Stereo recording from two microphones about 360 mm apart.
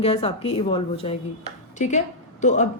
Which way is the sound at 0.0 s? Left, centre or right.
Centre.